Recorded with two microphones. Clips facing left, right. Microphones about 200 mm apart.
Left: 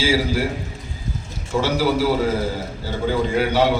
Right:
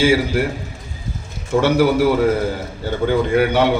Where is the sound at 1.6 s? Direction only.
60° right (ahead or behind).